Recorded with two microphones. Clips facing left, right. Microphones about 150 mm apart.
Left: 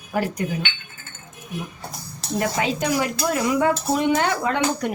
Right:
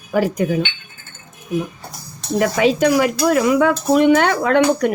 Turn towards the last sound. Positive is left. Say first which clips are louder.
# right 8 dB
turn(degrees=-75)  # may be behind; listen again after turning